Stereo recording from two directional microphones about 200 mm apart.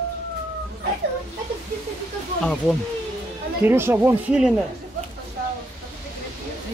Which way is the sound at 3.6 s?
10° right (ahead or behind).